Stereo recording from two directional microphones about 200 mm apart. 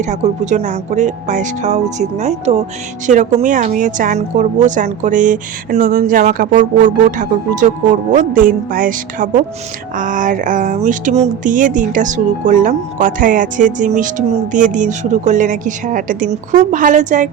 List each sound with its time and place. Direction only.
0.0 s speech: 35° right (ahead or behind)